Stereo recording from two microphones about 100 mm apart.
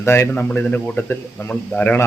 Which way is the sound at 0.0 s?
25° left (ahead or behind).